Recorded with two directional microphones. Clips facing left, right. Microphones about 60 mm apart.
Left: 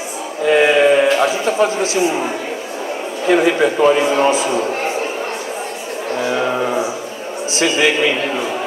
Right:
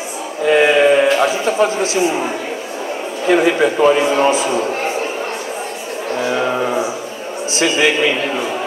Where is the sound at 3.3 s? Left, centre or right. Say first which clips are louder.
Even; right.